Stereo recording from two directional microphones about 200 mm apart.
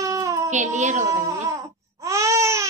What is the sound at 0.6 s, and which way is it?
Speech, 35° right (ahead or behind).